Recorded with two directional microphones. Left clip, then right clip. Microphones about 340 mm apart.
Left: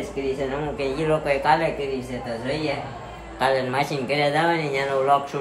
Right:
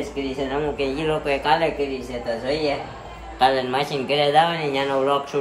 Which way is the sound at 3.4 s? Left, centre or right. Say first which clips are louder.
Right 2 dB; centre.